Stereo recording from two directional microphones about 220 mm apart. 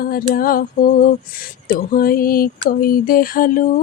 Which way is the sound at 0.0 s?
40° left (ahead or behind).